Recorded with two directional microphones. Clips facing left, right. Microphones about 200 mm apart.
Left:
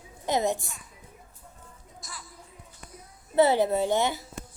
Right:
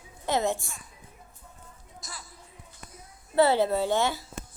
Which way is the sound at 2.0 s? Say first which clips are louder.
Even; 40° right (ahead or behind).